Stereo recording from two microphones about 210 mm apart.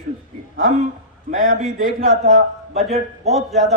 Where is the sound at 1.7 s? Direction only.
40° right (ahead or behind).